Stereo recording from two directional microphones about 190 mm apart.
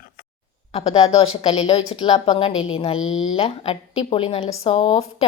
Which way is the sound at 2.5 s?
90° left.